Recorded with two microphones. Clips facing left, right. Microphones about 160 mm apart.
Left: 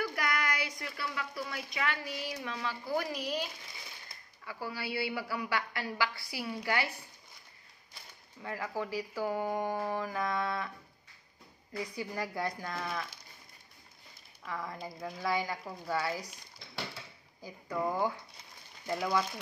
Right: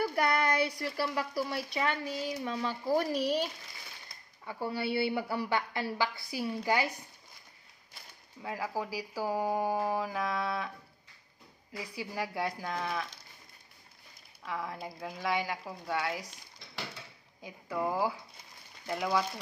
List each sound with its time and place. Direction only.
0.0 s speech: 30° right (ahead or behind)
4.5 s a woman's voice: 25° right (ahead or behind)
8.4 s speech: 10° right (ahead or behind)
11.9 s a woman's voice: 5° right (ahead or behind)
14.4 s a woman's voice: 5° right (ahead or behind)
17.6 s a woman's voice: 5° right (ahead or behind)